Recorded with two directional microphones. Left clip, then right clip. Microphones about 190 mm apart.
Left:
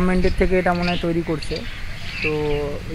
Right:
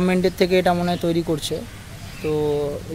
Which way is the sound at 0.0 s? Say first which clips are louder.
Right 1 dB; 30° right (ahead or behind).